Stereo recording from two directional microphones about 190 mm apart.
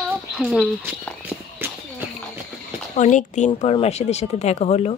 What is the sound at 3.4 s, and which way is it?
Speech, 30° left (ahead or behind).